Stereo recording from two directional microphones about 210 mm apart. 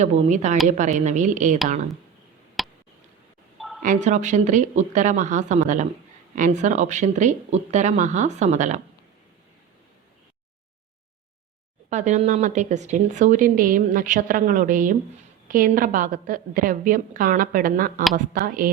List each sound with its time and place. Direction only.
0.0 s a woman's voice: 35° right (ahead or behind)
2.6 s a sound: centre (ahead or behind)
3.8 s a woman's voice: 35° right (ahead or behind)
11.9 s a woman's voice: 35° right (ahead or behind)